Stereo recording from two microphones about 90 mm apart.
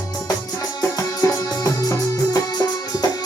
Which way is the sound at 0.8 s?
35° left (ahead or behind).